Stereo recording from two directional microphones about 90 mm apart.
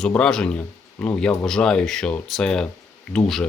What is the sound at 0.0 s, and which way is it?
Speech, 10° left (ahead or behind).